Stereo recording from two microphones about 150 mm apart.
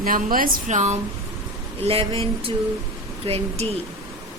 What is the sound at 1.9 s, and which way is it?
A woman's voice, 40° right (ahead or behind).